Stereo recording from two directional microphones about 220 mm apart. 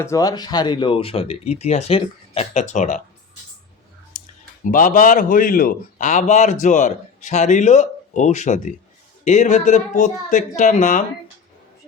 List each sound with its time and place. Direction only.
0.0 s speech: 15° left (ahead or behind); by 3.0 s 35° left (ahead or behind)
4.6 s speech: 35° left (ahead or behind)